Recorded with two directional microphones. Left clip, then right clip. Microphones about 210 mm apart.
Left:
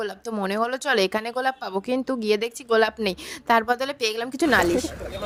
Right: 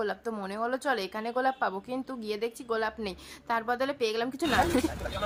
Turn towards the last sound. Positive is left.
turn(degrees=35)  # may be behind; listen again after turning